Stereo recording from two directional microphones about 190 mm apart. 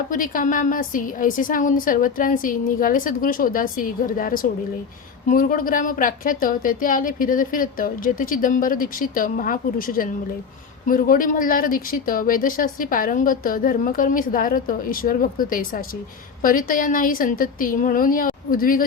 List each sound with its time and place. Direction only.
0.1 s speech: 45° left (ahead or behind)